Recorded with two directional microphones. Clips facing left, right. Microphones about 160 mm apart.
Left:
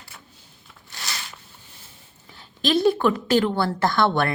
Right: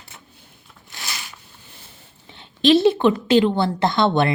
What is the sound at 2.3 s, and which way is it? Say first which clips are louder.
A woman's voice: right 7 dB; 25° right (ahead or behind).